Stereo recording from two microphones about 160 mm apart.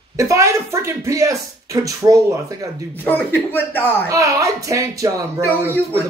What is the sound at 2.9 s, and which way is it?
Speech, 10° left (ahead or behind).